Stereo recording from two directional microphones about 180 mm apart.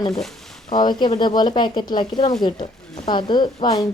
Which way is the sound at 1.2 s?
25° left (ahead or behind).